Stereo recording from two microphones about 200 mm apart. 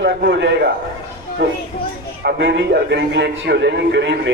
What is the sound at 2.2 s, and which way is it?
A man's voice, 60° right (ahead or behind).